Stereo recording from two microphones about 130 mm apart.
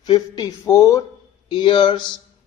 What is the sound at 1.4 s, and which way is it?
Speech, 40° left (ahead or behind).